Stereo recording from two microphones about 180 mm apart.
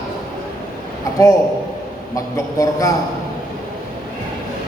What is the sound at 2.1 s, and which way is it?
Speech, 20° left (ahead or behind).